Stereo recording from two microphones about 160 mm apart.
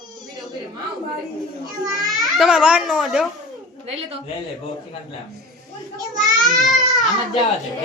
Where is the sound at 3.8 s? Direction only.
40° right (ahead or behind).